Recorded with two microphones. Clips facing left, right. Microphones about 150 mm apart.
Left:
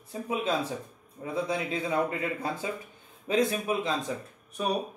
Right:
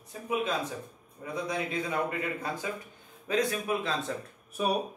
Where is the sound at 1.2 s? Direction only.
25° left (ahead or behind).